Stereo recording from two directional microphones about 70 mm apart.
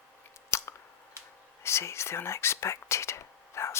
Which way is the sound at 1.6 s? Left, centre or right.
Left.